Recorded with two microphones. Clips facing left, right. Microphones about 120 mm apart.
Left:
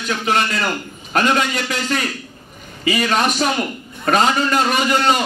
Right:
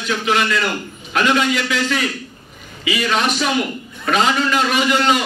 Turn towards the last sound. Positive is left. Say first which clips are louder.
# even
turn(degrees=45)  # may be behind; listen again after turning